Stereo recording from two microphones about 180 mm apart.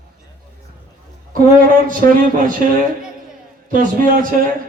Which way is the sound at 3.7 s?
50° right (ahead or behind).